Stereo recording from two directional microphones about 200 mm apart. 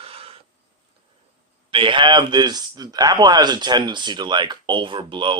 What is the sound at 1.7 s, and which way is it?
Speech, 25° right (ahead or behind).